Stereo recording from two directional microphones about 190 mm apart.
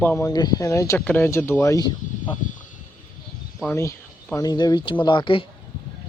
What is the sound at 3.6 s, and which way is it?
Speech, 10° left (ahead or behind).